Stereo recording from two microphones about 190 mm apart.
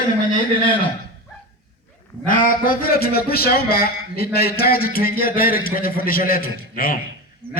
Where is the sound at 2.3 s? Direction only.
45° left (ahead or behind).